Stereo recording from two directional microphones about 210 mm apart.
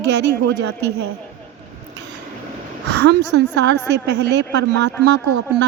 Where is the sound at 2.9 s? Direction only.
55° right (ahead or behind).